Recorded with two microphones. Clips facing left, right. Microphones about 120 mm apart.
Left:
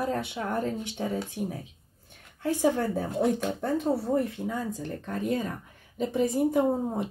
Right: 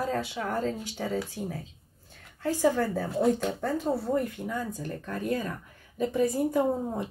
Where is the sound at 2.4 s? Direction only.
15° left (ahead or behind).